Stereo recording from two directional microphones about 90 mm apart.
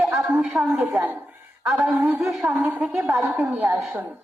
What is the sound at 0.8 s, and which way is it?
Speech, 20° right (ahead or behind).